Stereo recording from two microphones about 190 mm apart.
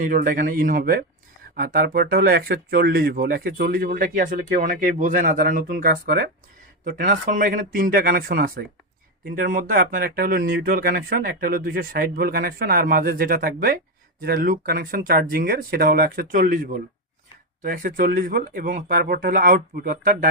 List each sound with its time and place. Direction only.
0.0 s speech: 45° right (ahead or behind)